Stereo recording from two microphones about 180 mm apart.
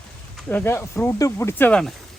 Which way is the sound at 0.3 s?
10° left (ahead or behind).